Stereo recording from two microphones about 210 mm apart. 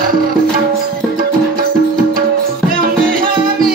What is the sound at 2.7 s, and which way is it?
Music, 45° right (ahead or behind).